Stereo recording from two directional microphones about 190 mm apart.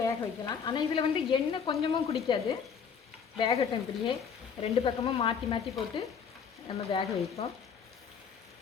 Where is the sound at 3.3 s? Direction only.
30° left (ahead or behind).